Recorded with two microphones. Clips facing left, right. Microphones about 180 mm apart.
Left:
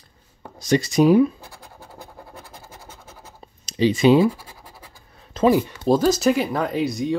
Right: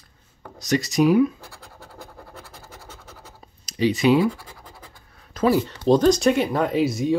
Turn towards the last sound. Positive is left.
turn(degrees=0)  # may be behind; listen again after turning